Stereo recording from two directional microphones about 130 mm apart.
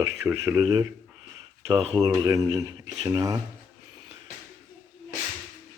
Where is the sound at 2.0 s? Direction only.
25° right (ahead or behind).